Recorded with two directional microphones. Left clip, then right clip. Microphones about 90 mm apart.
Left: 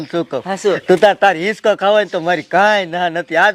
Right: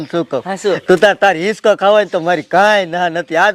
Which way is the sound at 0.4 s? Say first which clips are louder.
Left 1 dB; 30° right (ahead or behind).